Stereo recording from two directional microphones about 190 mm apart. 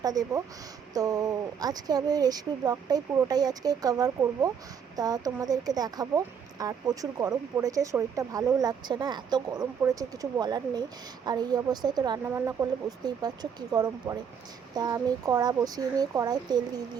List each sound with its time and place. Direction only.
0.0 s speech: 20° right (ahead or behind)